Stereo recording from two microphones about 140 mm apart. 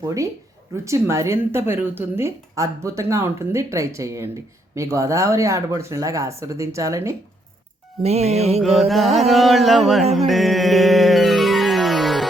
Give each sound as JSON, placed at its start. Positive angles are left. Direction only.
{"t": 0.0, "sound": "a woman's voice", "side_deg": -25}
{"t": 8.0, "sound": "music", "side_deg": -50}
{"t": 8.9, "sound": "music", "side_deg": 0}